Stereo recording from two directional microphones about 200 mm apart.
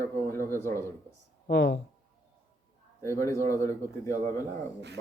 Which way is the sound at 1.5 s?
60° left (ahead or behind).